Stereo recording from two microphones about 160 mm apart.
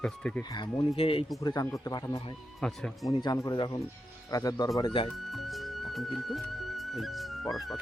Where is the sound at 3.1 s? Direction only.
25° left (ahead or behind).